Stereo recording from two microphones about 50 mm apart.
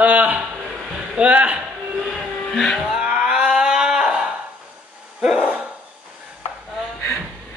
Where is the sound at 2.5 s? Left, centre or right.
Centre.